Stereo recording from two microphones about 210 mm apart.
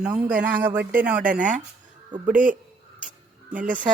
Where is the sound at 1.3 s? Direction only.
40° right (ahead or behind).